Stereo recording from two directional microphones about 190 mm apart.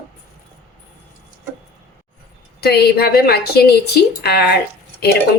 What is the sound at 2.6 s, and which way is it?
Speech, 55° left (ahead or behind).